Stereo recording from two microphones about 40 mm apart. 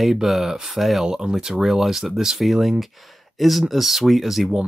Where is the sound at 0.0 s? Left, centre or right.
Centre.